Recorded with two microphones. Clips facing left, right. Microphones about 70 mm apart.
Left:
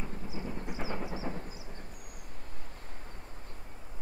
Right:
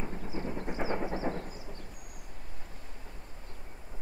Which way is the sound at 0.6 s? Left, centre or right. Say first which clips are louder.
Right 6 dB; right.